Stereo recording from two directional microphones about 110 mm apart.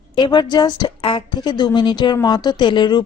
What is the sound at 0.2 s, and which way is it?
A woman's voice, 45° left (ahead or behind).